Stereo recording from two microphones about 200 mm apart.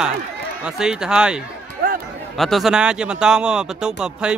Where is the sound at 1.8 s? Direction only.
45° right (ahead or behind).